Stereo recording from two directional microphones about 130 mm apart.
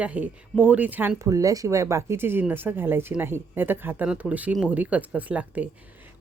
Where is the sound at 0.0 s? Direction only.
10° right (ahead or behind).